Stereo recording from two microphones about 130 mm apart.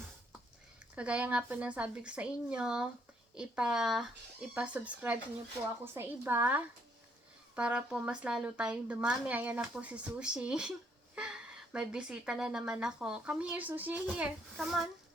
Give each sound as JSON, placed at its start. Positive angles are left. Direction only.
{"t": 0.9, "sound": "a woman's voice", "side_deg": -10}